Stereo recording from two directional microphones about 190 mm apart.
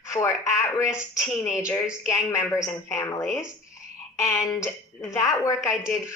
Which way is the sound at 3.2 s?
Centre (ahead or behind).